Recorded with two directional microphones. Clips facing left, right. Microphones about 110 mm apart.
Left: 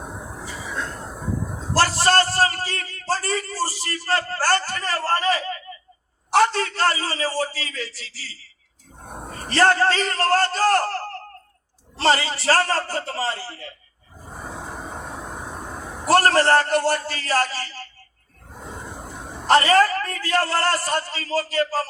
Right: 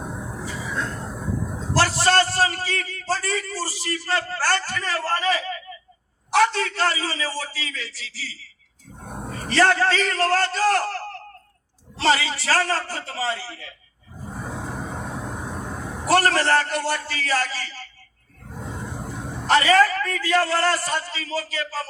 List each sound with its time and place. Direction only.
0.4 s a sound: 10° left (ahead or behind)
1.7 s a man's voice: 40° left (ahead or behind)
9.6 s a man's voice: 40° left (ahead or behind)
16.1 s a man's voice: 40° left (ahead or behind)
19.5 s a man's voice: 45° left (ahead or behind)